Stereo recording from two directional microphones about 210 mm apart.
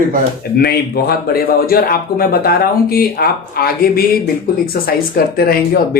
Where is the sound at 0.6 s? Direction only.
45° left (ahead or behind).